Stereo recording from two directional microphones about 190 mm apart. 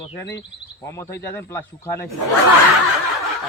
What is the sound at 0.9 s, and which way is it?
Speech, 15° left (ahead or behind).